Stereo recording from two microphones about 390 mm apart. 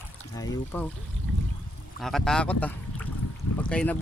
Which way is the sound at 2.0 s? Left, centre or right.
Centre.